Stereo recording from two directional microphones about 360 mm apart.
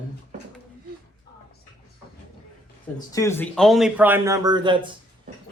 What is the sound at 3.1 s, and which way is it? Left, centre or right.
A man's voice, centre.